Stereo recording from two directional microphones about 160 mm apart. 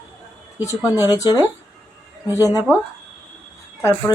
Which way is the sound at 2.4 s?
20° left (ahead or behind).